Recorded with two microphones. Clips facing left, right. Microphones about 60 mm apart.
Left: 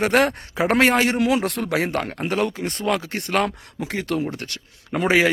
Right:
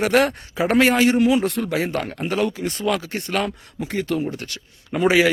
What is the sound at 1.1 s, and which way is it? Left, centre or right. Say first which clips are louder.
Speech: right 3 dB; left.